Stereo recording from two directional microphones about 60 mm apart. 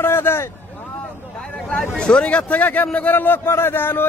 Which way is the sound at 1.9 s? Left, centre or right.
Centre.